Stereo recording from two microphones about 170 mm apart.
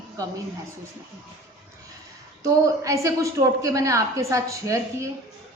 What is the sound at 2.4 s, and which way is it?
A woman's voice, 20° right (ahead or behind).